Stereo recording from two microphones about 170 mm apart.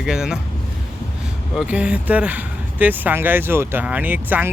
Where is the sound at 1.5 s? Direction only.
5° right (ahead or behind).